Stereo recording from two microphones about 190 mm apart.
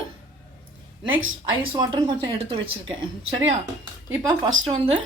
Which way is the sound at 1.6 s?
25° right (ahead or behind).